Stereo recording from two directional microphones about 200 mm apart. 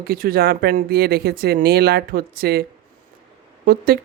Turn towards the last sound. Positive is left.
turn(degrees=-50)  # may be behind; listen again after turning